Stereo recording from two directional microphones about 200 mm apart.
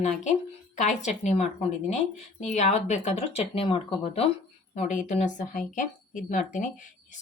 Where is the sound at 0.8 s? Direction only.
35° left (ahead or behind).